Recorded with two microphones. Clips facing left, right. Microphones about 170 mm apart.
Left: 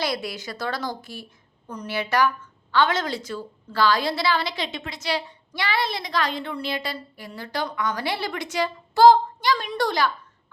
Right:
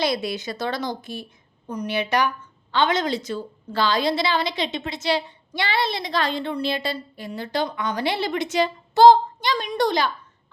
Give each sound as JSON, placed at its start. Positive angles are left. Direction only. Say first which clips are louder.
{"t": 0.0, "sound": "a woman's voice", "louder": "right 4 dB", "side_deg": -20}